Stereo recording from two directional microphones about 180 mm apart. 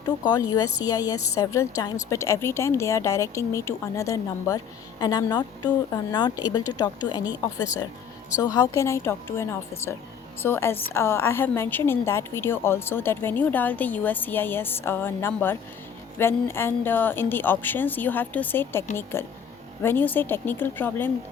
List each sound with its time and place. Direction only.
0.0 s a woman's voice: 20° left (ahead or behind)